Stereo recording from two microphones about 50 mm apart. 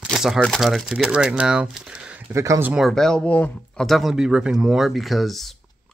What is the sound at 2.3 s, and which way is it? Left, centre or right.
Speech, right.